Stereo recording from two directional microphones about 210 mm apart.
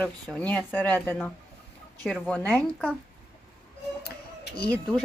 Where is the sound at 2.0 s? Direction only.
5° left (ahead or behind).